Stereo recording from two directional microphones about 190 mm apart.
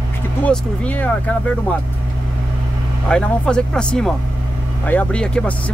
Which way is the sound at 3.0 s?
5° left (ahead or behind).